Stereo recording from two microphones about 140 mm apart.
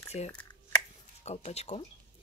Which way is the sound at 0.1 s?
50° left (ahead or behind).